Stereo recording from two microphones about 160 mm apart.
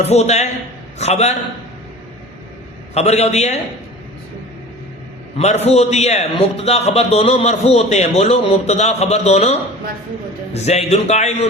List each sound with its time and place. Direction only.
0.0 s a man's voice: 40° left (ahead or behind)
2.9 s a man's voice: 40° left (ahead or behind)
5.4 s a man's voice: 40° left (ahead or behind)